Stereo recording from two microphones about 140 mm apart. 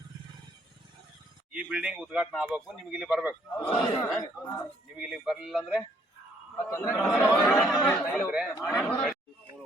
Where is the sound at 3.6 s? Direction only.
15° left (ahead or behind).